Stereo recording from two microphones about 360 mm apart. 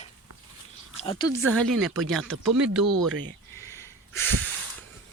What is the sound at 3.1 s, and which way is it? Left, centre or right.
Speech, right.